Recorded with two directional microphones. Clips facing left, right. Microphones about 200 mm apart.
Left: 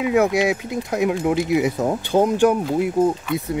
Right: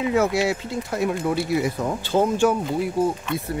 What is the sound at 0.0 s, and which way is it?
Speech, 15° left (ahead or behind).